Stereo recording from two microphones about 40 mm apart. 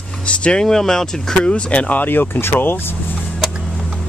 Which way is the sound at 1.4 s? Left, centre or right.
Left.